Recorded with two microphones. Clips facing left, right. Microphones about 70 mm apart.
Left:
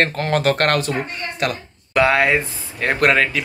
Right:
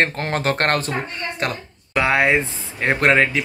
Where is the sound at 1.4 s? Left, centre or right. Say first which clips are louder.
Left 5 dB; right.